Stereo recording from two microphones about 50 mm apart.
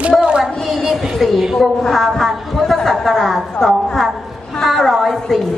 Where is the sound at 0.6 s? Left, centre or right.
Centre.